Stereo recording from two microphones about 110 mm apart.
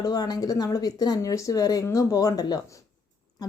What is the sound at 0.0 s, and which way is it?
Speech, 35° left (ahead or behind).